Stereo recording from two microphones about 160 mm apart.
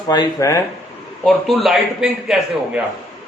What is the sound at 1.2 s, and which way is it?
A man's voice, centre (ahead or behind).